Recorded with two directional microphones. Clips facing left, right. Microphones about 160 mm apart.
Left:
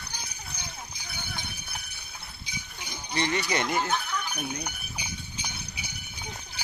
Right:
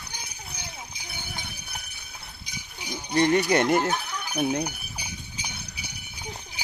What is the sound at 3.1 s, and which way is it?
Speech, 50° right (ahead or behind).